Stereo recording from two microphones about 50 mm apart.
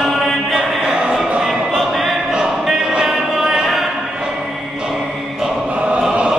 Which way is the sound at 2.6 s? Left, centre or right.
Centre.